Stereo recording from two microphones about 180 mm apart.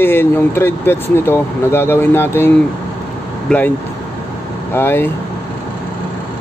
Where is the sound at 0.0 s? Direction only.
10° left (ahead or behind).